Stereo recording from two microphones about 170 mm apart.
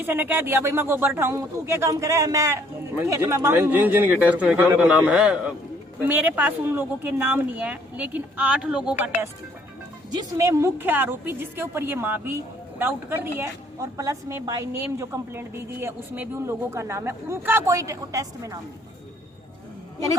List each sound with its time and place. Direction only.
0.0 s a woman's voice: 10° right (ahead or behind)